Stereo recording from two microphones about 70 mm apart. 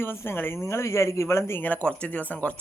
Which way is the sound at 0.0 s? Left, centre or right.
Left.